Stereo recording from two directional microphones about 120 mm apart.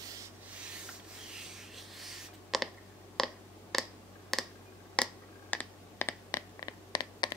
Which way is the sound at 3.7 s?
Centre (ahead or behind).